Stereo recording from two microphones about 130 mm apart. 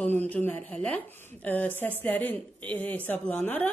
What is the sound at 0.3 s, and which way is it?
A woman's voice, 15° left (ahead or behind).